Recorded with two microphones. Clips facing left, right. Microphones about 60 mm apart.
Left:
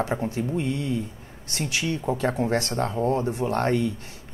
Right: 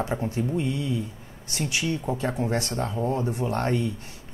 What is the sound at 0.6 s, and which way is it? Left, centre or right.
Speech, left.